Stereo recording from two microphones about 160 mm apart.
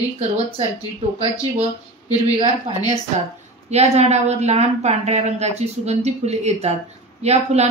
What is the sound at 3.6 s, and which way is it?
A woman's voice, 45° right (ahead or behind).